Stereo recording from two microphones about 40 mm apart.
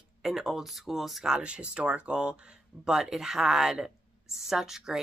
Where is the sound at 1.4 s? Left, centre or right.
Right.